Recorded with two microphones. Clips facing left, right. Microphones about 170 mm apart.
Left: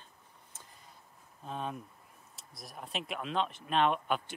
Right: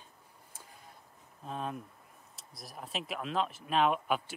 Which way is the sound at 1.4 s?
Centre (ahead or behind).